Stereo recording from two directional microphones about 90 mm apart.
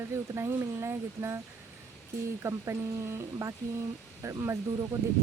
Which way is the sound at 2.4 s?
30° right (ahead or behind).